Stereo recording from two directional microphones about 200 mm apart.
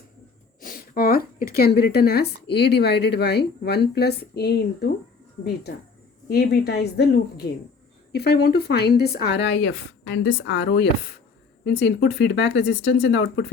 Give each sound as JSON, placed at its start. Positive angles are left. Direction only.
{"t": 0.6, "sound": "a woman's voice", "side_deg": 45}